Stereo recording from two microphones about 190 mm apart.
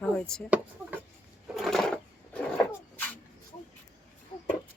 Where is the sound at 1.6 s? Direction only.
Centre (ahead or behind).